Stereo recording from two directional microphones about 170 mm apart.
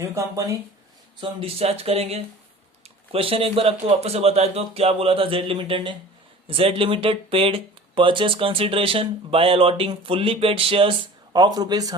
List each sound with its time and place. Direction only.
0.0 s speech: 15° right (ahead or behind)
1.2 s speech: 35° right (ahead or behind)